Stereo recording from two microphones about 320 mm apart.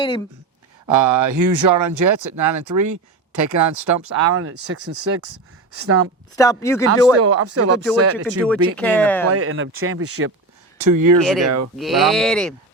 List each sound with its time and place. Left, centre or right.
0.9 s speech: right
6.3 s speech: centre
7.2 s speech: right
8.7 s speech: centre
9.3 s speech: right
10.8 s speech: right
11.4 s speech: right
11.8 s speech: centre